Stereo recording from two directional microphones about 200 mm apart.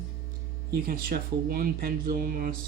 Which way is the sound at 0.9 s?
45° right (ahead or behind).